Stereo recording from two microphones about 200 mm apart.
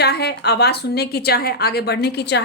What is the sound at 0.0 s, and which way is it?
A woman's voice, 55° left (ahead or behind).